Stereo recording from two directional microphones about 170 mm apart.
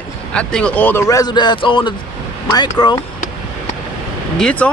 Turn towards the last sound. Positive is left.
turn(degrees=5)  # may be behind; listen again after turning